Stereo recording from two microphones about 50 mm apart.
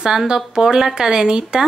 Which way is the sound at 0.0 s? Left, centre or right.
Centre.